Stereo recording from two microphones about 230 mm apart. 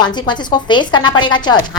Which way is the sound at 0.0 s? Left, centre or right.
Centre.